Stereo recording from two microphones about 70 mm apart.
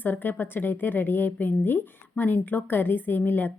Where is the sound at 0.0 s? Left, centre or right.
Left.